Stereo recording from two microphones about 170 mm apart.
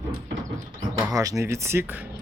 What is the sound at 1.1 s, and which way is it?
Speech, 20° right (ahead or behind).